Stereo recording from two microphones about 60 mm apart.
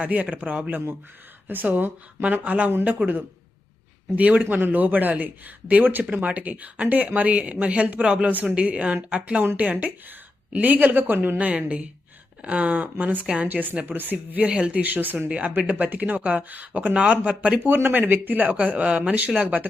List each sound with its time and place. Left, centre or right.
0.0 s a man's voice: right
4.1 s a woman's voice: right
10.5 s speech: right
17.8 s speech: right